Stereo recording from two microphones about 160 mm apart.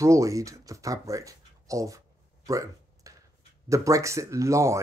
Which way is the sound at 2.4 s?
20° right (ahead or behind).